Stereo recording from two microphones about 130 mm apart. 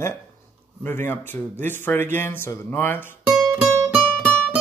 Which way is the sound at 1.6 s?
15° left (ahead or behind).